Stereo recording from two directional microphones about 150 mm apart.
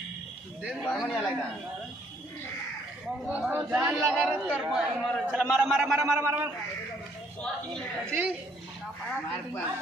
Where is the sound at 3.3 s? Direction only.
10° right (ahead or behind).